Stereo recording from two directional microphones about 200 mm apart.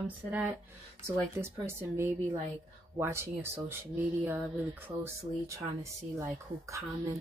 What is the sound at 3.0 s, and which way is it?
Speech, 10° right (ahead or behind).